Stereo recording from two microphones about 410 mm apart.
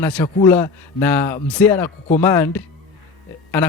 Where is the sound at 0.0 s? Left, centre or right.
Centre.